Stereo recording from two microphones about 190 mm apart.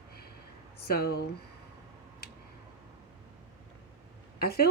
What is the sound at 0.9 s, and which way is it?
Speech, 55° left (ahead or behind).